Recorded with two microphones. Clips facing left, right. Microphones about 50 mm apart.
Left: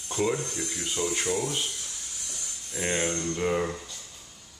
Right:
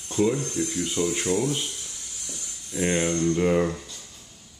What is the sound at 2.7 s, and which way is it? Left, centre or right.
Speech, centre.